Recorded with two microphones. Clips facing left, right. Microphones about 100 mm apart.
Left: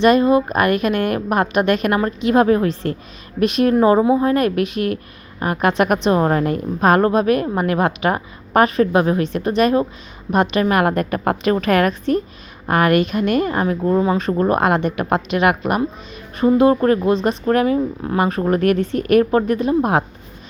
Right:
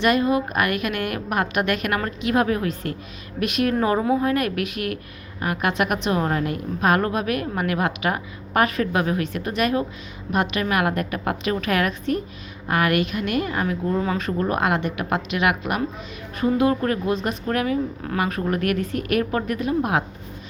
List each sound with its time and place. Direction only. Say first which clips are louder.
0.0 s a woman's voice: left 6 dB; 30° left (ahead or behind)
14.0 s a woman's voice: left 6 dB; 25° left (ahead or behind)